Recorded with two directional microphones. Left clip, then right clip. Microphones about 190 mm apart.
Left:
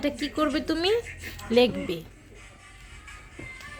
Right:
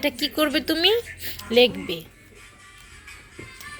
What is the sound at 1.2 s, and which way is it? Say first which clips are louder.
Speech: right 4 dB; 15° left (ahead or behind).